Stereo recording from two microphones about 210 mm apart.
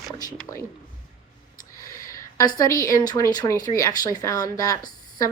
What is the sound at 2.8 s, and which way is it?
Speech, 20° left (ahead or behind).